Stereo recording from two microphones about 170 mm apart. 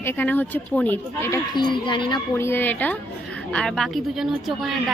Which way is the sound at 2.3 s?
15° left (ahead or behind).